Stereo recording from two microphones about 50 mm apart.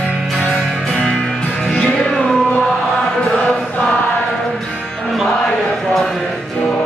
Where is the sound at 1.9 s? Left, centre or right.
Centre.